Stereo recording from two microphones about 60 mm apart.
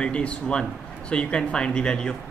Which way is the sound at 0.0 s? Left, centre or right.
Centre.